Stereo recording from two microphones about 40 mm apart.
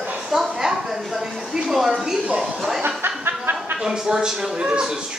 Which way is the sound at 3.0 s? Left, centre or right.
Right.